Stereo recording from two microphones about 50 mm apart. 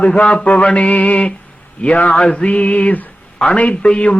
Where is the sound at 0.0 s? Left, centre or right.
Centre.